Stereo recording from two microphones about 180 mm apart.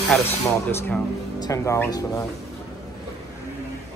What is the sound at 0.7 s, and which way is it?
Speech, 10° left (ahead or behind).